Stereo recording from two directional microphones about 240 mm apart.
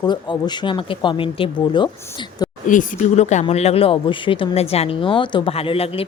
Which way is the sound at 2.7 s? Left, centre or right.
Left.